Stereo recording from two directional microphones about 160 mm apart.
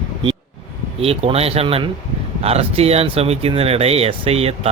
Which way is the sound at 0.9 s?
40° right (ahead or behind).